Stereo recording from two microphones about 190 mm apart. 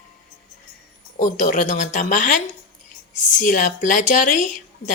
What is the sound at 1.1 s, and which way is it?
A woman's voice, 40° left (ahead or behind).